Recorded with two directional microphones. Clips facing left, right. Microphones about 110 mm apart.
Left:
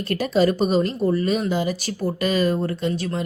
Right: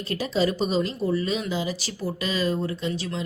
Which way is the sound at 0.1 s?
55° left (ahead or behind).